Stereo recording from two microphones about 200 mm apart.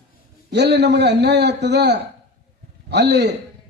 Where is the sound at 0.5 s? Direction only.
60° right (ahead or behind).